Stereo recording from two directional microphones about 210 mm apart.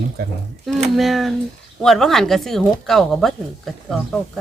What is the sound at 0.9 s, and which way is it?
Speech, centre (ahead or behind).